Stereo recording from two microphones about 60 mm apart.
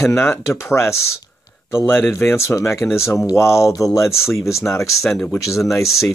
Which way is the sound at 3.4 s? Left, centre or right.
Left.